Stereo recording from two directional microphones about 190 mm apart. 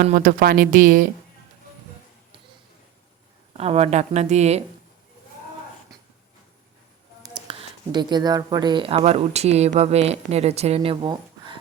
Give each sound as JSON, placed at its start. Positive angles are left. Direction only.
{"t": 0.0, "sound": "speech", "side_deg": -45}
{"t": 3.6, "sound": "speech", "side_deg": -30}
{"t": 7.4, "sound": "speech", "side_deg": -25}